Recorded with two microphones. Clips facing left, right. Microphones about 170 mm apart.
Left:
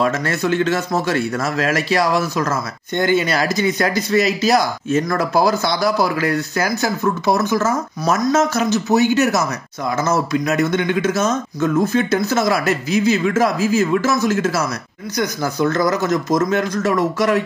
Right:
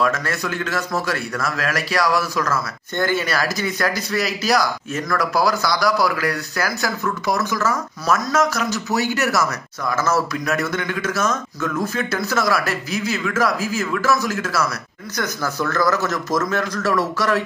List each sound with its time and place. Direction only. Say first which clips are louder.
0.0 s speech: left 3 dB; 25° left (ahead or behind)